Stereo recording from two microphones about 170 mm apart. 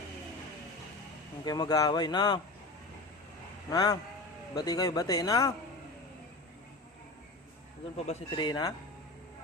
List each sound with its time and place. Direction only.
1.5 s a man's voice: 25° left (ahead or behind)
3.7 s a man's voice: 20° left (ahead or behind)
7.9 s a man's voice: 40° left (ahead or behind)
8.4 s a man's voice: 25° left (ahead or behind)